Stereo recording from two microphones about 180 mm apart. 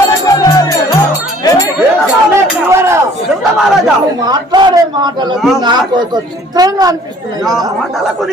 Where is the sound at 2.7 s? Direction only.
15° right (ahead or behind).